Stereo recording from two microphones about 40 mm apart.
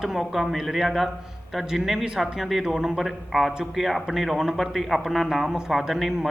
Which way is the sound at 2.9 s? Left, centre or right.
Centre.